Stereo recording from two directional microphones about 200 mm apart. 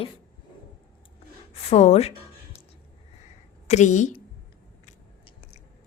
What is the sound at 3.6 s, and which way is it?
Speech, 35° left (ahead or behind).